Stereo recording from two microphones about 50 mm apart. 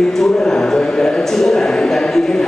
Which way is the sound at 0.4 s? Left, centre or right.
Centre.